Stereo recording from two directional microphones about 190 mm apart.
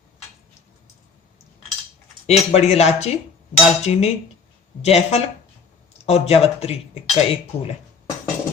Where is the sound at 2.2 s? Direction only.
35° left (ahead or behind).